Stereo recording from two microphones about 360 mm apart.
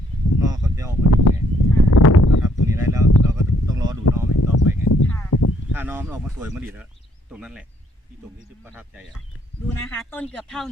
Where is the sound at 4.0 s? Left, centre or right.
Left.